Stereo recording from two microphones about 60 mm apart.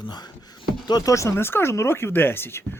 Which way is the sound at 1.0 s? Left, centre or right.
Left.